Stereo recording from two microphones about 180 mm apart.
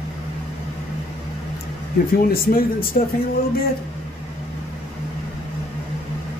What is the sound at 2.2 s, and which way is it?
Speech, 55° left (ahead or behind).